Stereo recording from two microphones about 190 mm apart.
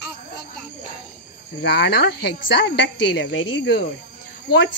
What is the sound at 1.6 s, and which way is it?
Speech, 60° left (ahead or behind).